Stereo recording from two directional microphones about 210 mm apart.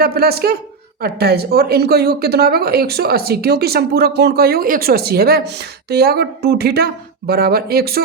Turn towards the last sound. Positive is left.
turn(degrees=-45)  # may be behind; listen again after turning